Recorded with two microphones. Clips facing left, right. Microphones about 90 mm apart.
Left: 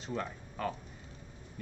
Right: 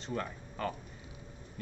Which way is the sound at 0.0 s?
Centre (ahead or behind).